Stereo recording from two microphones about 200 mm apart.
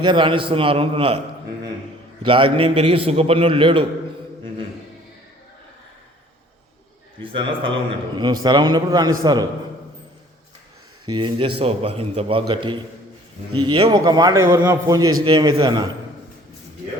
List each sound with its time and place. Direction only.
0.0 s a man's voice: 25° right (ahead or behind)
2.2 s a man's voice: 25° right (ahead or behind)
7.2 s a man's voice: 25° right (ahead or behind)
11.0 s a man's voice: 25° right (ahead or behind)